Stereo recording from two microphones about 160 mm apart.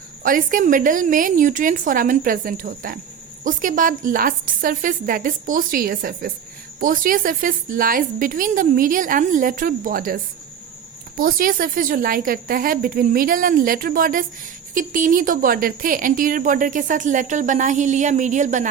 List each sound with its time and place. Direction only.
0.2 s speech: 60° right (ahead or behind)
11.2 s a woman's voice: 60° right (ahead or behind)